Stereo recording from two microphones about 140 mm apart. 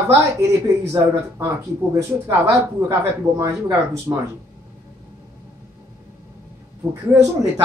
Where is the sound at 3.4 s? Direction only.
20° right (ahead or behind).